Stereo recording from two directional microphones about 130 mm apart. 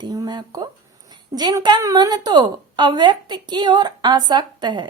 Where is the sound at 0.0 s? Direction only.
30° right (ahead or behind).